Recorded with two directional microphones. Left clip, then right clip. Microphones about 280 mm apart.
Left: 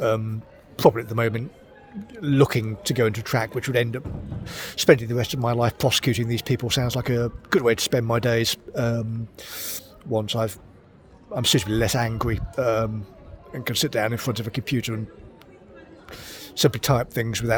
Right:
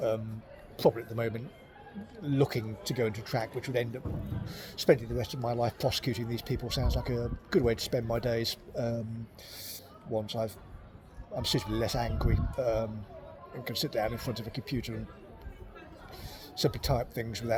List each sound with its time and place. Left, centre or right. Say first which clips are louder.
0.8 s speech: left 9 dB; left
16.0 s speech: left 11 dB; left